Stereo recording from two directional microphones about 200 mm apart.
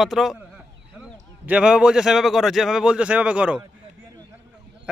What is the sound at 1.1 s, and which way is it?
A man's voice, 5° right (ahead or behind).